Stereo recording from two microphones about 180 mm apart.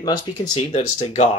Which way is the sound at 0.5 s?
40° left (ahead or behind).